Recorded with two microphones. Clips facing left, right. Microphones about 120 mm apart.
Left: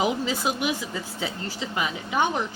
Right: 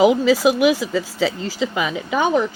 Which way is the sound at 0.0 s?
90° right.